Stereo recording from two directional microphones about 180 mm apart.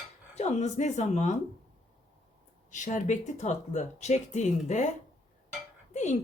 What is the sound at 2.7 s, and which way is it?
Speech, 45° left (ahead or behind).